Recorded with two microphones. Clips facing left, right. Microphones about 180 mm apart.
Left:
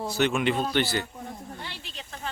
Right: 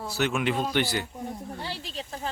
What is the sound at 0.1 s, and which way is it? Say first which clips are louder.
Speech: left 1 dB; 5° right (ahead or behind).